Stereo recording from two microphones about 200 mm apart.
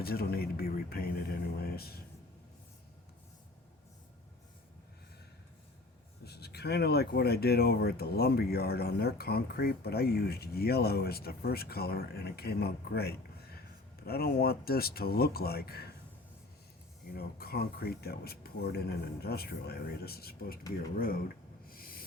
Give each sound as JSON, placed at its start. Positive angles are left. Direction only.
{"t": 0.0, "sound": "speech", "side_deg": 50}
{"t": 6.2, "sound": "speech", "side_deg": 55}
{"t": 17.2, "sound": "speech", "side_deg": 50}
{"t": 21.7, "sound": "a sound", "side_deg": 45}